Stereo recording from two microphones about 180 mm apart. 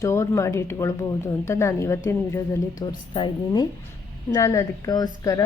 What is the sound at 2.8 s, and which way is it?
A woman's voice, 25° left (ahead or behind).